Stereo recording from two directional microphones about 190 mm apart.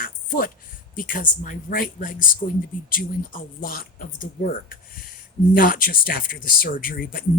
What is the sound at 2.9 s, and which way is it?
Speech, 45° left (ahead or behind).